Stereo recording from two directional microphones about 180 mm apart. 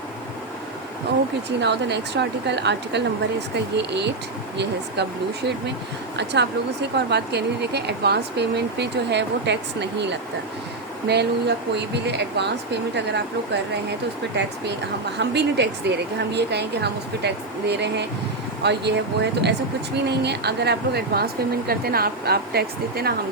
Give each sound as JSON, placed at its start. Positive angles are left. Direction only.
{"t": 1.5, "sound": "speech", "side_deg": -70}
{"t": 15.2, "sound": "speech", "side_deg": -70}